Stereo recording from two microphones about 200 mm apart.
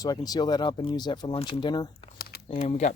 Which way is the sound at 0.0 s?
20° left (ahead or behind).